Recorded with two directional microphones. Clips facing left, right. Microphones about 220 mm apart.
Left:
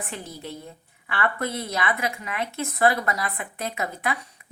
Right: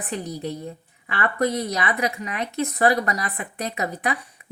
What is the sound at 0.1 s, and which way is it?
A woman's voice, 15° right (ahead or behind).